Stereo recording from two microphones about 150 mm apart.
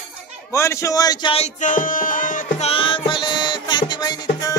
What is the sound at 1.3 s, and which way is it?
Music, 55° left (ahead or behind).